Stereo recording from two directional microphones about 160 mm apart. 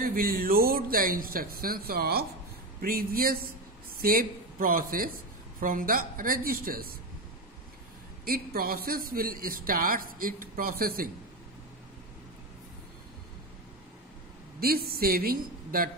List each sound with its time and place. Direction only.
0.0 s a man's voice: 65° right (ahead or behind)
8.3 s a man's voice: 70° right (ahead or behind)
14.9 s speech: 70° right (ahead or behind)